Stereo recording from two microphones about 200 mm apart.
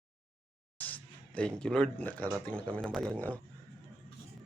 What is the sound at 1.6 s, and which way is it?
Speech, 5° left (ahead or behind).